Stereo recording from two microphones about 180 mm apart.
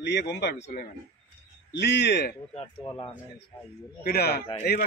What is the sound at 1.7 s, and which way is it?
Speech, 75° left (ahead or behind).